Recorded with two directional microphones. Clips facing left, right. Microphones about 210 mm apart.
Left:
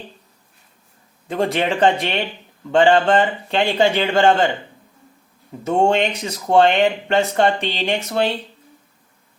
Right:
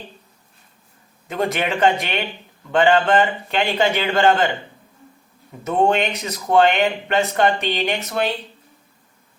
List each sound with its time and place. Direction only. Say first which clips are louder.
1.3 s a man's voice: left 2 dB; 30° left (ahead or behind)
5.6 s speech: left 1 dB; 30° left (ahead or behind)